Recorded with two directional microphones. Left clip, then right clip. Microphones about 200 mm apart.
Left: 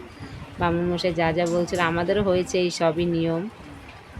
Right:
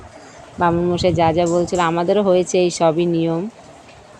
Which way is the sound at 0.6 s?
20° right (ahead or behind).